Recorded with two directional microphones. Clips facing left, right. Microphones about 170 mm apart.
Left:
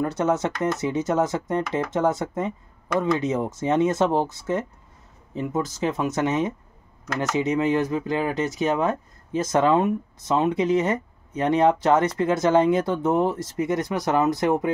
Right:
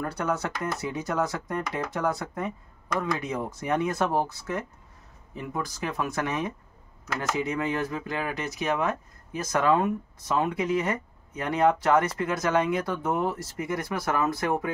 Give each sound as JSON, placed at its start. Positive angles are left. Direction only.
{"t": 0.0, "sound": "speech", "side_deg": 20}